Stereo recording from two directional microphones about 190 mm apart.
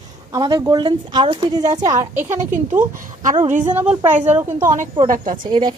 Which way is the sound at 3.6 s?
10° right (ahead or behind).